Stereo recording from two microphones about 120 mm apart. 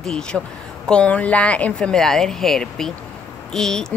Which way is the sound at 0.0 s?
5° left (ahead or behind).